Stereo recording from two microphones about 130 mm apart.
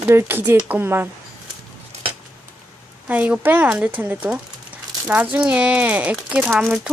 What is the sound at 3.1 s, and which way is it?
A woman's voice, 10° right (ahead or behind).